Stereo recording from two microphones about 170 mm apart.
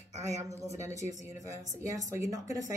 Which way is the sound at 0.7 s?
15° right (ahead or behind).